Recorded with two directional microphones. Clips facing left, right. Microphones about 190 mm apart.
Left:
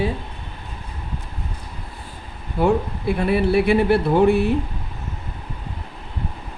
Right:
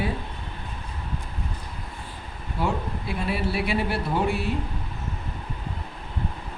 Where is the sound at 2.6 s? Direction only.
55° left (ahead or behind).